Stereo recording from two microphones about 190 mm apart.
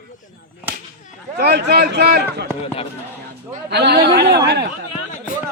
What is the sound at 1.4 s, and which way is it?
A man's voice, 60° right (ahead or behind).